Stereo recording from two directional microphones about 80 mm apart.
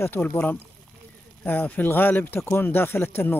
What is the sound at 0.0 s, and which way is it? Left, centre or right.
Speech, left.